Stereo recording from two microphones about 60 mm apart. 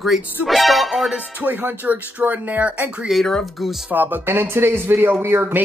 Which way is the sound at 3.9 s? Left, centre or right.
Right.